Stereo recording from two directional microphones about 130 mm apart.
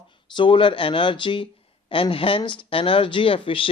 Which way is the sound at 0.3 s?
40° left (ahead or behind).